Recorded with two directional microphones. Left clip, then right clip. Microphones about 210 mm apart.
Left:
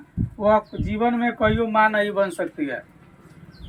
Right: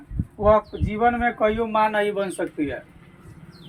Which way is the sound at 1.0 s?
35° left (ahead or behind).